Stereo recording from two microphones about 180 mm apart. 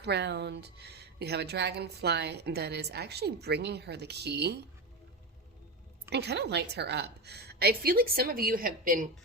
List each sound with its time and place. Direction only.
0.0 s speech: 70° right (ahead or behind)
6.1 s speech: 70° right (ahead or behind); by 9.0 s 50° right (ahead or behind)